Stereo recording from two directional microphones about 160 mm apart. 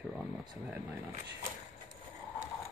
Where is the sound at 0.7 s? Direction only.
10° right (ahead or behind).